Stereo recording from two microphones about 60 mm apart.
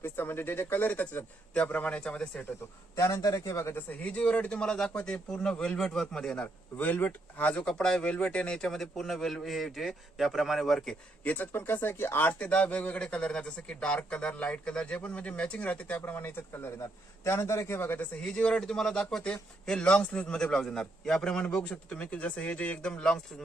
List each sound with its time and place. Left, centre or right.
0.0 s a man's voice: left; by 2.4 s centre
2.9 s a man's voice: left
3.8 s a man's voice: left
6.7 s speech: left
7.9 s a man's voice: centre
11.2 s a man's voice: left
12.4 s speech: left
16.0 s a man's voice: left
18.2 s a man's voice: centre